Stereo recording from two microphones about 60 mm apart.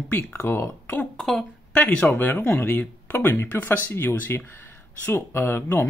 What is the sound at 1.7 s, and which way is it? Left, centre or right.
Speech, left.